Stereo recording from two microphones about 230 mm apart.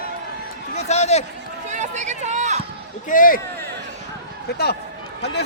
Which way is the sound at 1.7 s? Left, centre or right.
Right.